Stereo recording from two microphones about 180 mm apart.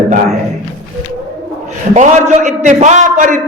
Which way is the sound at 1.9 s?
40° right (ahead or behind).